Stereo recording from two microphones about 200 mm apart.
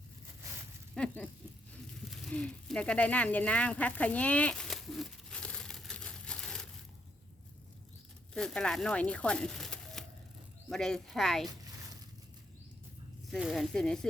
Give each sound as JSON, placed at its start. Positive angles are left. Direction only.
{"t": 0.9, "sound": "speech", "side_deg": 5}
{"t": 2.0, "sound": "a sound", "side_deg": 0}
{"t": 8.3, "sound": "speech", "side_deg": 5}
{"t": 13.3, "sound": "speech", "side_deg": 0}